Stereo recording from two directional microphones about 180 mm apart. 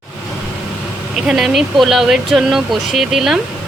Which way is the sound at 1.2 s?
5° right (ahead or behind).